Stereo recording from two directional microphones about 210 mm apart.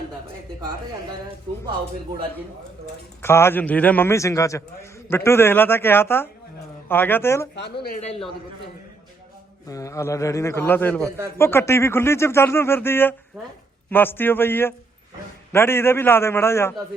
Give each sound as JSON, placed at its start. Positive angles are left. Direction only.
{"t": 3.2, "sound": "speech", "side_deg": 10}
{"t": 7.5, "sound": "speech", "side_deg": 50}
{"t": 9.6, "sound": "speech", "side_deg": 15}
{"t": 13.4, "sound": "a woman's voice", "side_deg": 0}
{"t": 13.9, "sound": "speech", "side_deg": 10}